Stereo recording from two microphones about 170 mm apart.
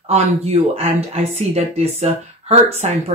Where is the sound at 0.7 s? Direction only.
35° right (ahead or behind).